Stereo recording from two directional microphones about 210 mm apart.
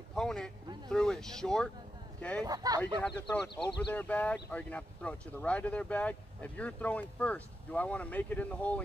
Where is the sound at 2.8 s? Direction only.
5° left (ahead or behind).